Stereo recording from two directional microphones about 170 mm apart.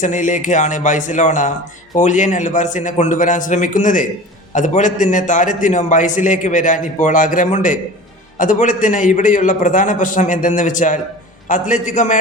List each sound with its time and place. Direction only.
0.0 s a man's voice: 45° left (ahead or behind)